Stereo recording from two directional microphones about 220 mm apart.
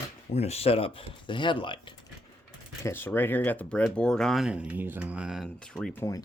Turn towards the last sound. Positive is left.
turn(degrees=15)  # may be behind; listen again after turning